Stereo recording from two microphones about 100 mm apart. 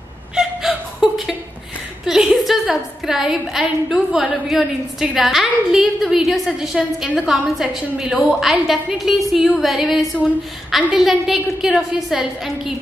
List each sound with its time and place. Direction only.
0.4 s chuckle: 5° right (ahead or behind)
2.0 s a woman's voice: 5° right (ahead or behind)